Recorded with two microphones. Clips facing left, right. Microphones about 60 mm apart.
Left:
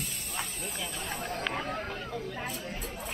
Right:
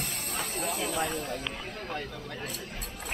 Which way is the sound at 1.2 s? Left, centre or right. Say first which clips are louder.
Right 1 dB; left.